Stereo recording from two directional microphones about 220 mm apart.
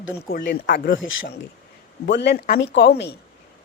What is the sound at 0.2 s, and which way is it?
Speech, 45° left (ahead or behind).